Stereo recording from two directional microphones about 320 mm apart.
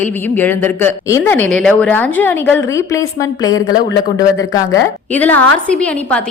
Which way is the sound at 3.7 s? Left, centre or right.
Left.